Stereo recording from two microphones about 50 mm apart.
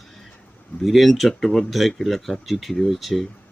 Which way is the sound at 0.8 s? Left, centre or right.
Centre.